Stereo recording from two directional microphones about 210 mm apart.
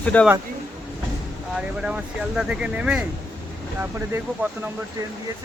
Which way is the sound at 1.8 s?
5° right (ahead or behind).